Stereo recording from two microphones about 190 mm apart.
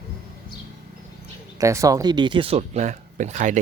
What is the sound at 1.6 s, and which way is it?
Speech, 15° right (ahead or behind).